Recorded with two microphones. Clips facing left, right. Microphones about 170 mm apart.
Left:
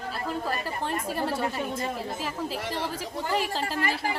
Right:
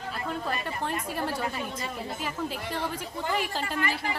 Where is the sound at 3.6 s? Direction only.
35° left (ahead or behind).